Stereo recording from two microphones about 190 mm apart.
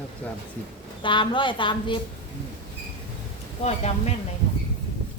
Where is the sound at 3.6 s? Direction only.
35° left (ahead or behind).